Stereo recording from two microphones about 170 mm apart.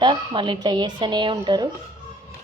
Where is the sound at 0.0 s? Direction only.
25° right (ahead or behind).